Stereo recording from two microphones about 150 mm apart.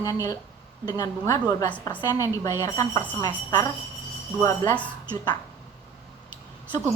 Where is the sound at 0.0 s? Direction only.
20° left (ahead or behind).